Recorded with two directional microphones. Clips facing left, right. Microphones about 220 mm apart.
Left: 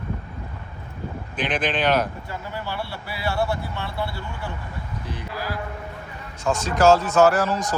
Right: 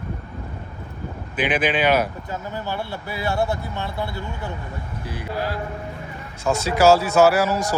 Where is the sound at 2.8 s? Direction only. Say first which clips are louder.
Right 3 dB; 20° right (ahead or behind).